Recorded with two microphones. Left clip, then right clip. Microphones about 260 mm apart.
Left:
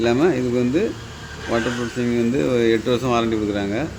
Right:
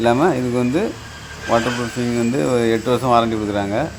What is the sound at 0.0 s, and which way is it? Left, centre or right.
Speech, centre.